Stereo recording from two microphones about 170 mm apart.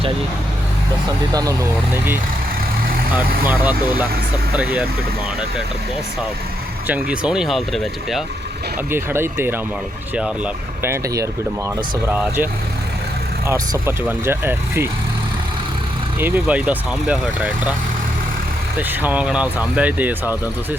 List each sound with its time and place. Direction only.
1.3 s speech: 20° right (ahead or behind)
3.4 s speech: 10° right (ahead or behind)
6.8 s speech: 10° right (ahead or behind)
8.9 s speech: 15° right (ahead or behind)
13.5 s speech: 15° right (ahead or behind)
16.2 s speech: 10° right (ahead or behind)
18.8 s speech: 10° right (ahead or behind)